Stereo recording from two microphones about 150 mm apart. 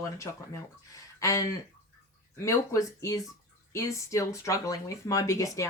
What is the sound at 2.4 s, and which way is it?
Speech, 20° left (ahead or behind).